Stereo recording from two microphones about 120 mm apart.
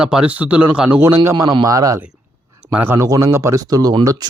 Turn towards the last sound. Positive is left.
turn(degrees=-30)  # may be behind; listen again after turning